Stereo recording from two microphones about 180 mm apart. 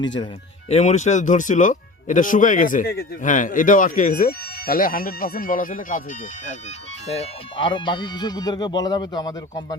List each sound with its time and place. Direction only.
0.7 s speech: 40° left (ahead or behind)
7.1 s speech: 30° left (ahead or behind)